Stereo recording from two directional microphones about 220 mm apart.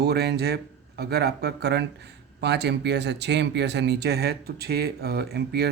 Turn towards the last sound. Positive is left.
turn(degrees=-45)  # may be behind; listen again after turning